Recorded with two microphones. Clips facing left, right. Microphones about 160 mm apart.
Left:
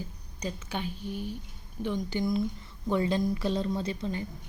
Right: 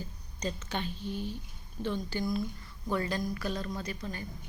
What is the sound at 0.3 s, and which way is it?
A woman's voice, 10° left (ahead or behind).